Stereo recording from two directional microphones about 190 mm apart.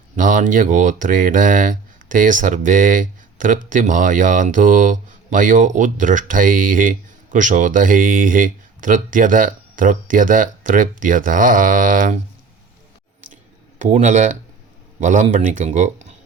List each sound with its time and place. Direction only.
0.2 s speech: 45° right (ahead or behind)
13.3 s a sound: 40° right (ahead or behind)
15.0 s speech: 40° right (ahead or behind)